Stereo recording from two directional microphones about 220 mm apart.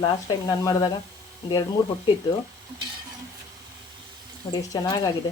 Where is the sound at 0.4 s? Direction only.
15° left (ahead or behind).